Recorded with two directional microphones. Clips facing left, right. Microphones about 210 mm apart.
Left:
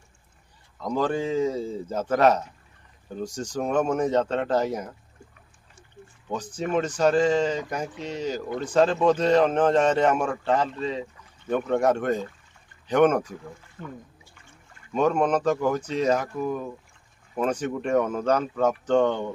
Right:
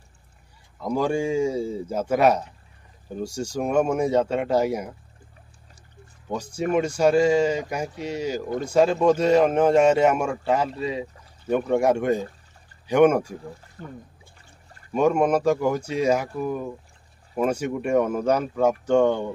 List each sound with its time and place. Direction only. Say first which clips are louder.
0.7 s speech: right 2 dB; 10° right (ahead or behind)
6.2 s speech: right 3 dB; 10° right (ahead or behind)
11.1 s pour: right 4 dB; 35° right (ahead or behind)
11.5 s speech: right 2 dB; 10° right (ahead or behind)
13.3 s a sound: right 3 dB; 35° right (ahead or behind)
14.9 s speech: right 2 dB; 10° right (ahead or behind)